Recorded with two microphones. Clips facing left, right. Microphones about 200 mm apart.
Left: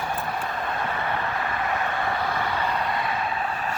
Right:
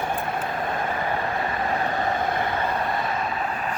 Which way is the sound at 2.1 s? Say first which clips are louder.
Right 2 dB; 50° right (ahead or behind).